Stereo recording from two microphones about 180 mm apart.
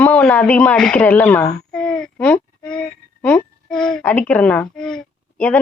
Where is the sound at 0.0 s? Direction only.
5° left (ahead or behind).